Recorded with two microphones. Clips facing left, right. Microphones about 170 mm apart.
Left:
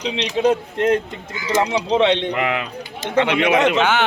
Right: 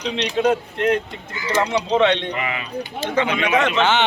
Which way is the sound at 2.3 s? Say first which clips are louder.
Left 4 dB; 70° left (ahead or behind).